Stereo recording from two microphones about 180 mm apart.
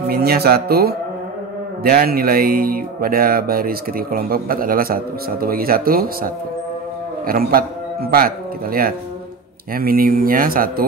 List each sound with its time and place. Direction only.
0.1 s a man's voice: 60° right (ahead or behind)
9.8 s speech: 55° right (ahead or behind)